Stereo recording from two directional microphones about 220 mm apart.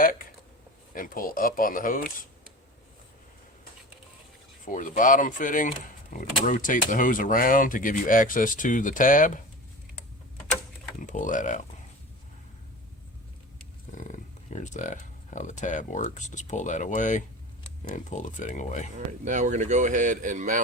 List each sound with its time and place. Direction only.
0.0 s a sound: 40° left (ahead or behind)
0.9 s speech: 40° left (ahead or behind)
4.6 s speech: 35° left (ahead or behind)
11.0 s speech: 35° left (ahead or behind)
13.9 s speech: 35° left (ahead or behind)
18.9 s speech: 35° right (ahead or behind)